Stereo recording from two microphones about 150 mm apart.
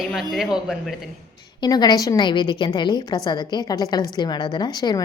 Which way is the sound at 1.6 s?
30° left (ahead or behind).